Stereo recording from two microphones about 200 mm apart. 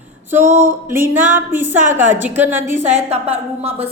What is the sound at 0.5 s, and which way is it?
Music, 10° right (ahead or behind).